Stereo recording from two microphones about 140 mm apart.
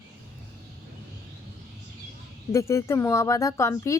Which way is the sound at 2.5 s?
20° left (ahead or behind).